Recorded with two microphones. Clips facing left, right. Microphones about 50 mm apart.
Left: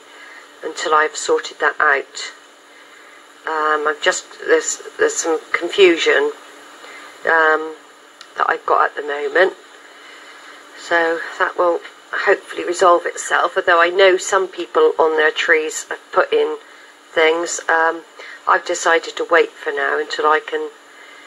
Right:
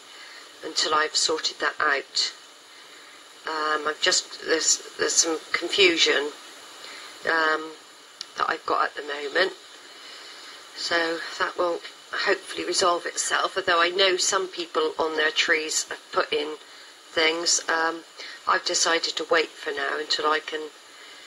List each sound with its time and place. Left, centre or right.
0.6 s speech: left
3.4 s speech: left
6.8 s a sound: left
8.4 s speech: left
10.8 s speech: left